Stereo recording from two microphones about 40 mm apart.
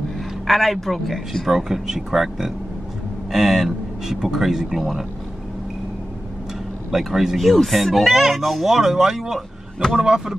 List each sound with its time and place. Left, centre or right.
0.5 s speech: centre
1.5 s speech: centre
6.9 s speech: centre
8.6 s speech: centre
10.0 s a sound: centre